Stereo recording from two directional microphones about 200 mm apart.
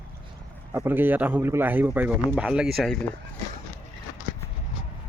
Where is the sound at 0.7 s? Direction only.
10° right (ahead or behind).